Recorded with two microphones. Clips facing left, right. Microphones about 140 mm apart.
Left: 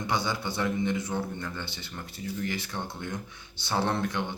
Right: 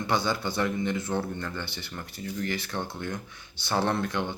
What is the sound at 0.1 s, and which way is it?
Speech, 20° left (ahead or behind).